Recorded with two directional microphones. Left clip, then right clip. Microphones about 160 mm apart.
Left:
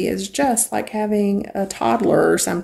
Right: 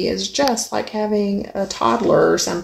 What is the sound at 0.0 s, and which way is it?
Speech, 10° left (ahead or behind).